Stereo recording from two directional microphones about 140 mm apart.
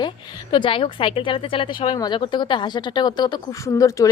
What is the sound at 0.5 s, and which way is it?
Speech, 40° left (ahead or behind).